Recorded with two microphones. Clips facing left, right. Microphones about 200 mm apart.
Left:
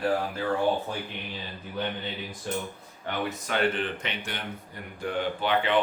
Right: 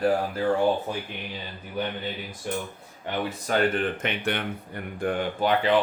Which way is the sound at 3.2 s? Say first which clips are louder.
Right 5 dB; 40° right (ahead or behind).